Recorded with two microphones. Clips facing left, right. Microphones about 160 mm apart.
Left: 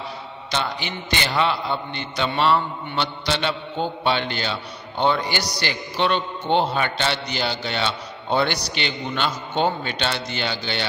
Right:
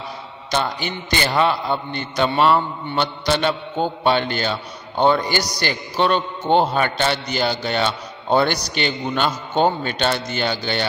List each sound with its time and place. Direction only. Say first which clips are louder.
0.5 s a man's voice: right 4 dB; 45° right (ahead or behind)